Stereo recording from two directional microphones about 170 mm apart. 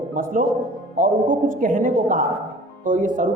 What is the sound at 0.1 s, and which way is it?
A man's voice, 55° right (ahead or behind).